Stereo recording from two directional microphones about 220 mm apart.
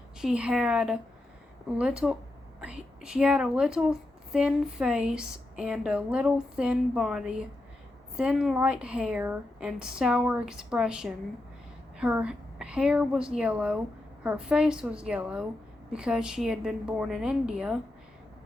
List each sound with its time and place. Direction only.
0.2 s a woman's voice: 5° right (ahead or behind)